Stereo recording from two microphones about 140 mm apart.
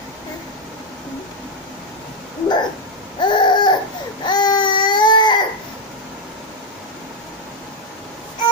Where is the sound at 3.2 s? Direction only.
30° left (ahead or behind).